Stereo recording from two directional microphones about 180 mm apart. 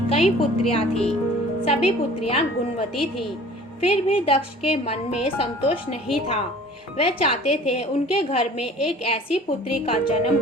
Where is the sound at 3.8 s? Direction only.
35° left (ahead or behind).